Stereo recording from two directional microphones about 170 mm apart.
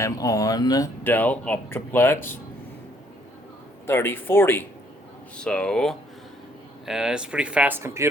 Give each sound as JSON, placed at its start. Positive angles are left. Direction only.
{"t": 0.0, "sound": "speech", "side_deg": 20}
{"t": 1.0, "sound": "speech", "side_deg": 10}
{"t": 3.8, "sound": "speech", "side_deg": 15}